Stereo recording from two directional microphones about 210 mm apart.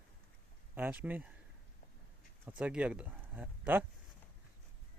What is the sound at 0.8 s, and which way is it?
Speech, 10° right (ahead or behind).